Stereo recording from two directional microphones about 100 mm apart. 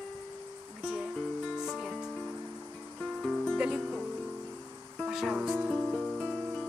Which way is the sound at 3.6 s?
10° right (ahead or behind).